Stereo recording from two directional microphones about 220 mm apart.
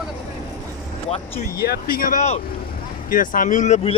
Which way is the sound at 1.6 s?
45° left (ahead or behind).